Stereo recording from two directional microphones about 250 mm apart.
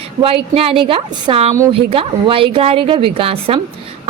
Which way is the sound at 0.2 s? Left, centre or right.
Right.